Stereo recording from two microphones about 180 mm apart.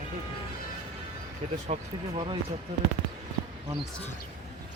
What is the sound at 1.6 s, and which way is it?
Speech, 30° right (ahead or behind).